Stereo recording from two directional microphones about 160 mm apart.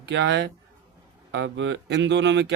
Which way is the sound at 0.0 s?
90° right.